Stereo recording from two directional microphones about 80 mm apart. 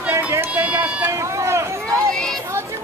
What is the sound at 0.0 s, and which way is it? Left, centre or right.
Run, right.